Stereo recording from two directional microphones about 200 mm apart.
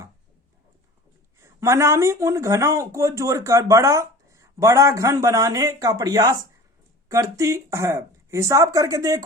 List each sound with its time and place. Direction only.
1.4 s speech: 15° right (ahead or behind)